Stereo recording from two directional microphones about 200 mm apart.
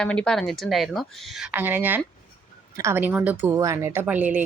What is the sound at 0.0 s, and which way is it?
Speech, 5° left (ahead or behind).